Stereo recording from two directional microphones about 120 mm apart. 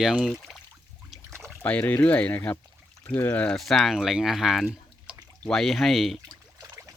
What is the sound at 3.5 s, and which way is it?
Speech, centre (ahead or behind).